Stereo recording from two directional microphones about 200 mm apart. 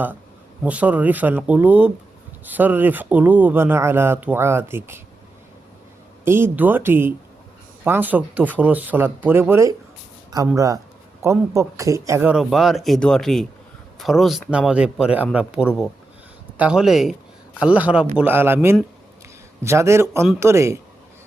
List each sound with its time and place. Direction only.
0.6 s speech: 5° right (ahead or behind)
6.2 s speech: 10° right (ahead or behind)